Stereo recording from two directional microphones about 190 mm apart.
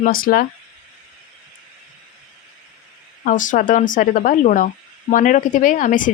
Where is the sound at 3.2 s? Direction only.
45° left (ahead or behind).